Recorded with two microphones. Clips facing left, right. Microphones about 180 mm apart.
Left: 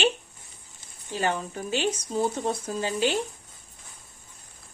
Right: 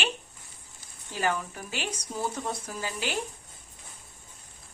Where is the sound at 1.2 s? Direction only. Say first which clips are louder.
Left 2 dB; 30° left (ahead or behind).